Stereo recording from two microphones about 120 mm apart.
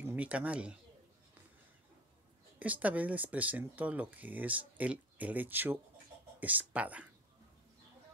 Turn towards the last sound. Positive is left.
turn(degrees=-10)  # may be behind; listen again after turning